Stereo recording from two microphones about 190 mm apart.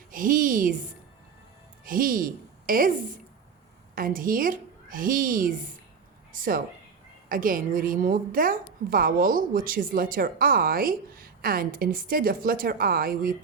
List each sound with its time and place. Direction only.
0.1 s a woman's voice: 45° right (ahead or behind)
1.8 s a woman's voice: 45° right (ahead or behind)
3.9 s a woman's voice: 45° right (ahead or behind)